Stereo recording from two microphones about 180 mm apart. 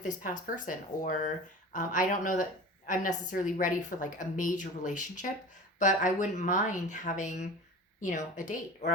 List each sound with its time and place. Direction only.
0.0 s a woman's voice: 45° left (ahead or behind)